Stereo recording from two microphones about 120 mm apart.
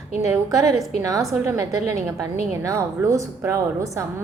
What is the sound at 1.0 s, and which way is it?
Speech, 30° right (ahead or behind).